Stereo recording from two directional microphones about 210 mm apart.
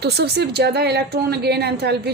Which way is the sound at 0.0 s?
50° right (ahead or behind).